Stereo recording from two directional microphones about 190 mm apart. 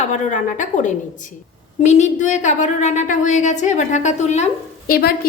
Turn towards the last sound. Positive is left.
turn(degrees=50)  # may be behind; listen again after turning